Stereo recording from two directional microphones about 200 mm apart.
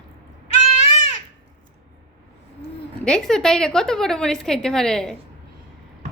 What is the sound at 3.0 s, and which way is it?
A woman's voice, 5° left (ahead or behind).